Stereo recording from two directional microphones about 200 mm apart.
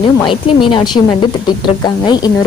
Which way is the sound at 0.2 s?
25° left (ahead or behind).